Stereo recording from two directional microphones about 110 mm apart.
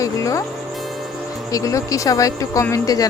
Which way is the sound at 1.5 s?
30° left (ahead or behind).